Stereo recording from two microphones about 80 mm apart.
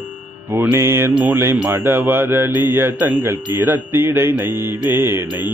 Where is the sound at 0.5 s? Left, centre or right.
Right.